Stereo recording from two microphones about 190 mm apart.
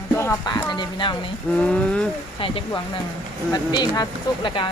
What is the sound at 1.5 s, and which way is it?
Speech, 5° left (ahead or behind).